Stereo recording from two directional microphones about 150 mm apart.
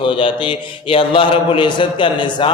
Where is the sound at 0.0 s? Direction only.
35° left (ahead or behind).